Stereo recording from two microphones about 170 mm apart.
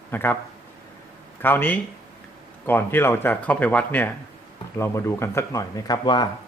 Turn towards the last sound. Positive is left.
turn(degrees=25)  # may be behind; listen again after turning